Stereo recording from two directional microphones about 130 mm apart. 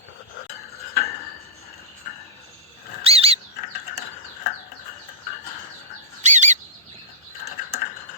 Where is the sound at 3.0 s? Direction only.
50° right (ahead or behind).